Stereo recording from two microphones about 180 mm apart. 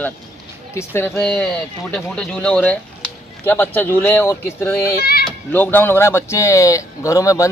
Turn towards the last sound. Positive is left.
turn(degrees=20)  # may be behind; listen again after turning